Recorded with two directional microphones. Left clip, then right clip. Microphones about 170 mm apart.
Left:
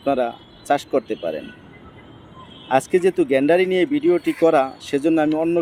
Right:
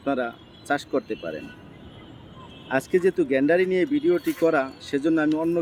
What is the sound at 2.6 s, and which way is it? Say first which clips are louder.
Speech: left 5 dB; 15° left (ahead or behind).